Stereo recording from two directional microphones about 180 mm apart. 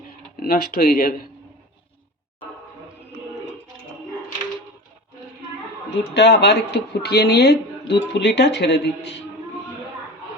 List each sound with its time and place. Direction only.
0.4 s speech: 55° left (ahead or behind)
6.1 s speech: 65° left (ahead or behind)